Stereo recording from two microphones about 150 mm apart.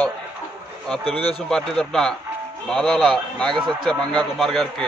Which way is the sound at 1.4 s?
5° left (ahead or behind).